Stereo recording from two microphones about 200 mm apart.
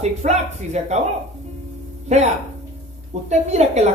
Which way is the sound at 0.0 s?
35° right (ahead or behind).